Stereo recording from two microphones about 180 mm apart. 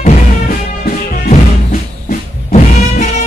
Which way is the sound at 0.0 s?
50° left (ahead or behind).